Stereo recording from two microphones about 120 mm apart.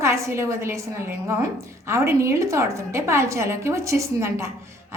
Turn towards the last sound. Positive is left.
turn(degrees=-25)  # may be behind; listen again after turning